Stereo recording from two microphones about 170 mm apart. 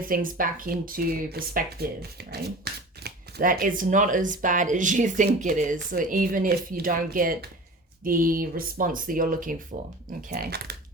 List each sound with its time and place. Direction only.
0.0 s speech: 55° right (ahead or behind)